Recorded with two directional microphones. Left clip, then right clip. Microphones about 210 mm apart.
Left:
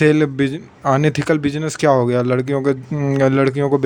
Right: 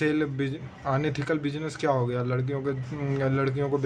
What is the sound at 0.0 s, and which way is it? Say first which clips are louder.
Speech: left 12 dB; 50° left (ahead or behind).